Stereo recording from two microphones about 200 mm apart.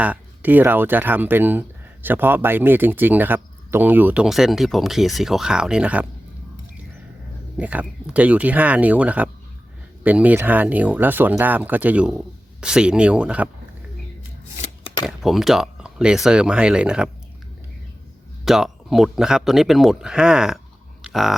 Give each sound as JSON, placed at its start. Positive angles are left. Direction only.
{"t": 0.0, "sound": "speech", "side_deg": -10}
{"t": 7.6, "sound": "speech", "side_deg": -5}
{"t": 14.6, "sound": "shuffling cards", "side_deg": 30}
{"t": 15.0, "sound": "speech", "side_deg": 0}
{"t": 18.4, "sound": "speech", "side_deg": 0}